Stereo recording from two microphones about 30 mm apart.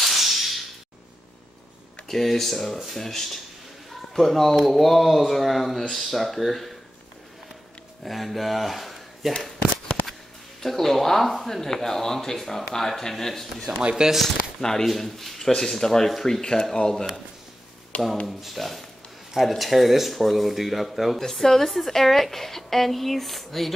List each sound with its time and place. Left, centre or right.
0.0 s whip: centre
2.0 s speech: centre
8.0 s speech: centre
10.6 s speech: centre
12.4 s speech: centre; by 17.0 s left
18.2 s speech: centre
21.2 s speech: centre